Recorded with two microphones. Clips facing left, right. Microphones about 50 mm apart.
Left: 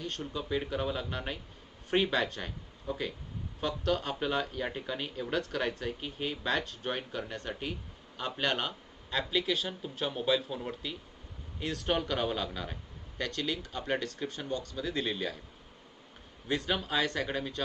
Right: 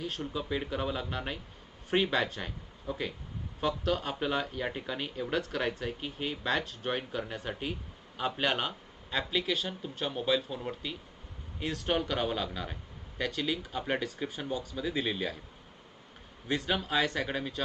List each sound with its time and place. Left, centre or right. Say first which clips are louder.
0.0 s speech: right 2 dB; centre
16.5 s speech: right 1 dB; centre